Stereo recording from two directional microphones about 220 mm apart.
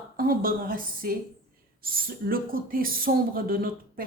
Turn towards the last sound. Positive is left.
turn(degrees=-40)  # may be behind; listen again after turning